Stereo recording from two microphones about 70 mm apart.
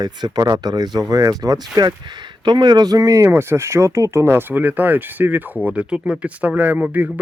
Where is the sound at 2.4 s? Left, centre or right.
Right.